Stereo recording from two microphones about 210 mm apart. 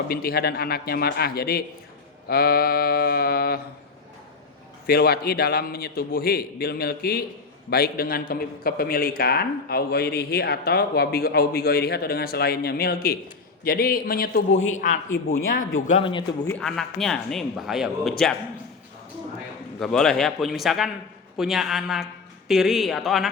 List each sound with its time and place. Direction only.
0.1 s a man's voice: 45° left (ahead or behind)
4.9 s a man's voice: 45° left (ahead or behind)
15.9 s speech: 25° left (ahead or behind)
16.5 s a man's voice: 5° left (ahead or behind)
19.8 s a man's voice: centre (ahead or behind)